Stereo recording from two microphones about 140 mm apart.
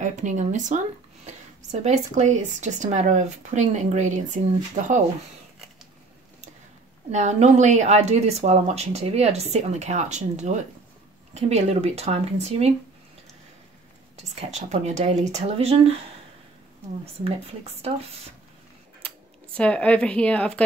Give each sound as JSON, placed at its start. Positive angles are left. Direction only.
{"t": 0.0, "sound": "speech", "side_deg": -60}
{"t": 7.1, "sound": "speech", "side_deg": -55}
{"t": 14.1, "sound": "speech", "side_deg": -50}
{"t": 17.0, "sound": "speech", "side_deg": -45}
{"t": 19.0, "sound": "speech", "side_deg": 10}